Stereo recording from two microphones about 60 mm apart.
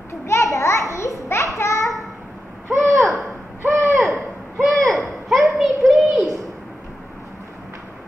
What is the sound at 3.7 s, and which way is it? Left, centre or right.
Hoot, right.